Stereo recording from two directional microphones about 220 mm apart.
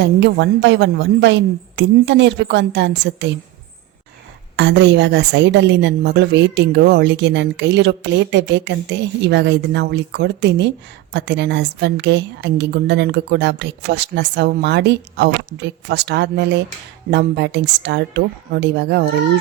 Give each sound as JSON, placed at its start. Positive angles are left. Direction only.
{"t": 0.0, "sound": "a woman's voice", "side_deg": -55}
{"t": 4.5, "sound": "a woman's voice", "side_deg": -50}